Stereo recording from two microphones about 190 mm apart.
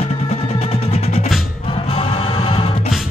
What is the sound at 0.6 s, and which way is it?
Music, 30° left (ahead or behind).